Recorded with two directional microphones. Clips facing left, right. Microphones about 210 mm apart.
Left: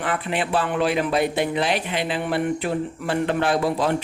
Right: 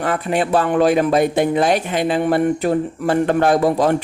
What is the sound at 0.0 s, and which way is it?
Speech, 45° right (ahead or behind).